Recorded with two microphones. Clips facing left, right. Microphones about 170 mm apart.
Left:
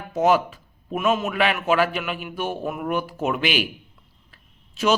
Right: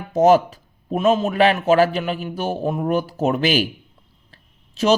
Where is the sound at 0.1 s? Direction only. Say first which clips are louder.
Right 5 dB; 40° right (ahead or behind).